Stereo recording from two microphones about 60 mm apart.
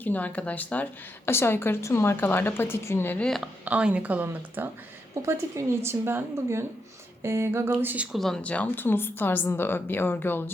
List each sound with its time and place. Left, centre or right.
0.0 s speech: left
1.2 s a woman's voice: left
3.7 s a woman's voice: centre; by 4.7 s right
5.2 s a woman's voice: right
8.1 s speech: centre
8.4 s a woman's voice: left